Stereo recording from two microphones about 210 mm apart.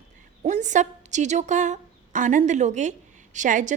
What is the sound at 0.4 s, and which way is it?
A woman's voice, 35° right (ahead or behind).